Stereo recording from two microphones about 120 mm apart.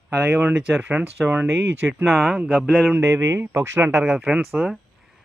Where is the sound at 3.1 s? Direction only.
20° right (ahead or behind).